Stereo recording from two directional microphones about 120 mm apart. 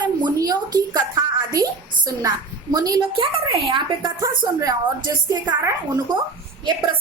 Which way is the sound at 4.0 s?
25° right (ahead or behind).